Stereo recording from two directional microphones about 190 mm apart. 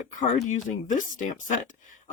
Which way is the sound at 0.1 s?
45° left (ahead or behind).